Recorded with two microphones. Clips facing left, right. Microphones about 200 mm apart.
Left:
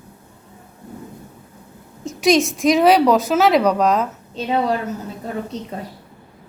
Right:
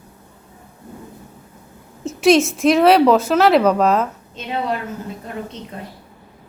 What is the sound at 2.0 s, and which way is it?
A woman's voice, centre (ahead or behind).